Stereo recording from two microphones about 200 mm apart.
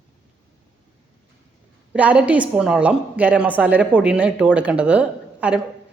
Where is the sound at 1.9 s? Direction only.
5° right (ahead or behind).